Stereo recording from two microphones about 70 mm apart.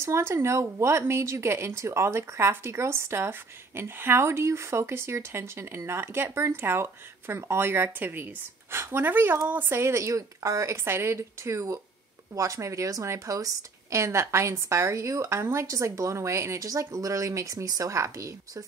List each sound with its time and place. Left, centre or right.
0.0 s a woman's voice: right